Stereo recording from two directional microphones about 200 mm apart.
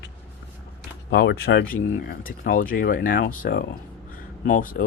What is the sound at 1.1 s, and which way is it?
Speech, 55° left (ahead or behind).